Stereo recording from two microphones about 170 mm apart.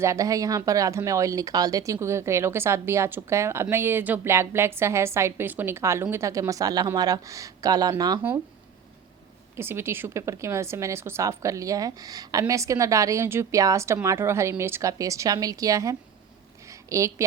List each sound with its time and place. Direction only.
0.0 s speech: 20° right (ahead or behind)
9.6 s a woman's voice: 15° right (ahead or behind)
16.6 s a sound: 20° right (ahead or behind)